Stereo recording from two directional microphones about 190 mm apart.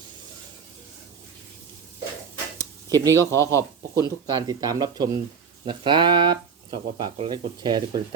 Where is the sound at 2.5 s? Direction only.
20° right (ahead or behind).